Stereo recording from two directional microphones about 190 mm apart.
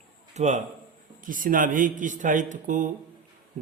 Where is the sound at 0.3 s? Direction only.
40° right (ahead or behind).